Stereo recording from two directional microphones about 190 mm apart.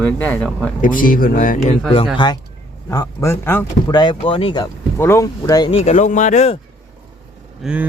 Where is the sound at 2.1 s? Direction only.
25° left (ahead or behind).